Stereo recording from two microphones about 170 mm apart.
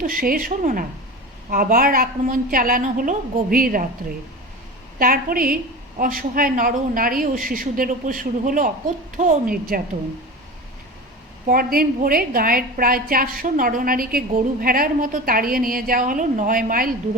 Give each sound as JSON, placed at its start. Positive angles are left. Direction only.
{"t": 0.0, "sound": "a woman's voice", "side_deg": -55}
{"t": 4.9, "sound": "a woman's voice", "side_deg": -55}
{"t": 11.4, "sound": "a woman's voice", "side_deg": -60}